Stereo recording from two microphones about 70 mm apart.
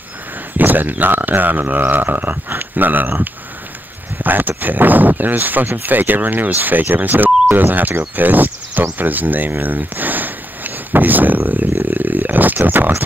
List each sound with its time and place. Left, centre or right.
0.6 s speech: right